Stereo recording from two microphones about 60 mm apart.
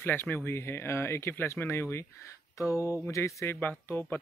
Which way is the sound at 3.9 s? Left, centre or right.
Left.